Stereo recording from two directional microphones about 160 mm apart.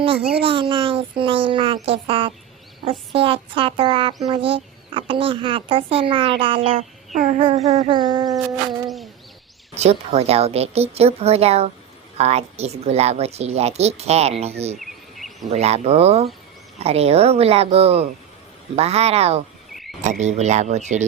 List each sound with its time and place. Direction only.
0.2 s speech: 90° right
0.4 s speech: 30° right (ahead or behind)
7.9 s speech: 25° right (ahead or behind)
9.7 s speech: 40° right (ahead or behind)
14.8 s insect: centre (ahead or behind)
15.4 s speech: 40° right (ahead or behind)